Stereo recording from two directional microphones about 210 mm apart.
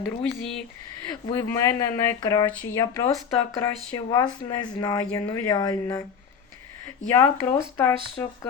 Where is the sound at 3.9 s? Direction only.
20° left (ahead or behind).